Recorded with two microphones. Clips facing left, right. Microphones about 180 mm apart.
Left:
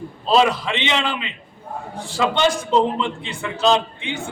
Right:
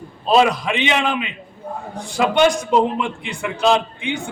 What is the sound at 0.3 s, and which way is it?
A man's voice, 15° right (ahead or behind).